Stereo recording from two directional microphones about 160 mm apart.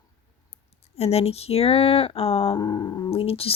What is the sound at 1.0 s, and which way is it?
Speech, 40° left (ahead or behind).